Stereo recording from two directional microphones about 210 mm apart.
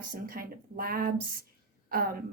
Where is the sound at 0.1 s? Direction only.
45° right (ahead or behind).